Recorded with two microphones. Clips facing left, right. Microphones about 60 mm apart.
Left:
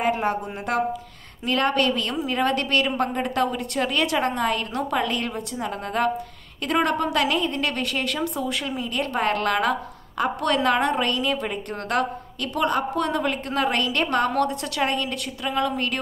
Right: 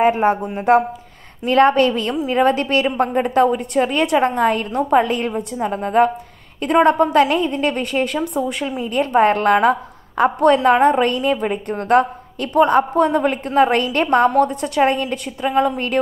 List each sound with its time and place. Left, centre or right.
0.0 s a woman's voice: right
7.0 s a woman's voice: right
7.4 s a woman's voice: centre